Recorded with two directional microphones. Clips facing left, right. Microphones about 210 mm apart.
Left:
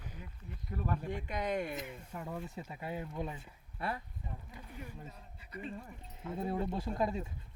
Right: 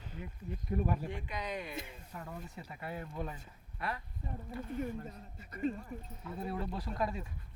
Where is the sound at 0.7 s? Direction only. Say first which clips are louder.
Right 4 dB; 15° right (ahead or behind).